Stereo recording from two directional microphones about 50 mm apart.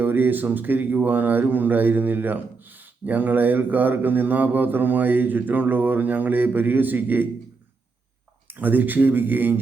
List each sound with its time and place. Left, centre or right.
0.0 s speech: right
8.4 s speech: right